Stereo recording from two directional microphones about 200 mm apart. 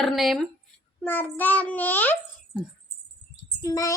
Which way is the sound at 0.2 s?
Centre (ahead or behind).